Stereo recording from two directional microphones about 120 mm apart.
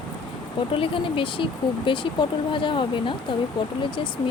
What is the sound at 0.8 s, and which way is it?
Speech, 45° left (ahead or behind).